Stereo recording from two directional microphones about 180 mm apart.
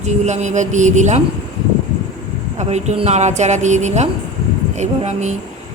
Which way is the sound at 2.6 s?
40° right (ahead or behind).